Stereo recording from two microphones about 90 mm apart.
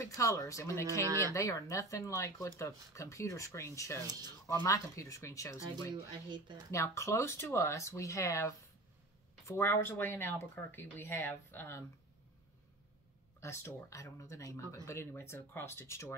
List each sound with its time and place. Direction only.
0.0 s speech: 35° left (ahead or behind)
1.0 s speech: 35° right (ahead or behind)
1.3 s speech: 35° left (ahead or behind)
9.5 s speech: 25° left (ahead or behind)
13.4 s speech: 30° left (ahead or behind)